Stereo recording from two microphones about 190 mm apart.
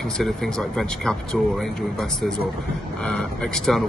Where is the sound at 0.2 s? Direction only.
Centre (ahead or behind).